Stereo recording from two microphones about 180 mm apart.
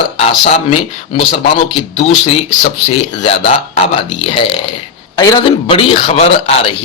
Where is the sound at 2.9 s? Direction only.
35° left (ahead or behind).